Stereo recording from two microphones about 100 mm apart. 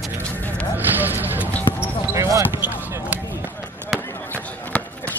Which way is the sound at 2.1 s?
30° right (ahead or behind).